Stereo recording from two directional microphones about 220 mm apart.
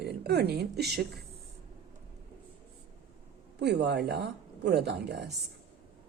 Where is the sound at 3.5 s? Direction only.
50° right (ahead or behind).